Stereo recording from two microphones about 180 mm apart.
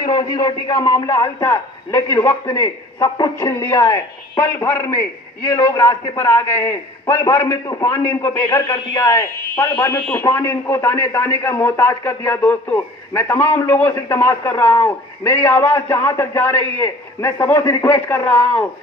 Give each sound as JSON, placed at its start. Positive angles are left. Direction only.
{"t": 0.0, "sound": "a man's voice", "side_deg": 25}